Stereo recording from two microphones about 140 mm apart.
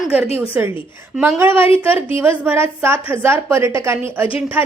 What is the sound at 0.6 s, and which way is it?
A woman's voice, 5° right (ahead or behind).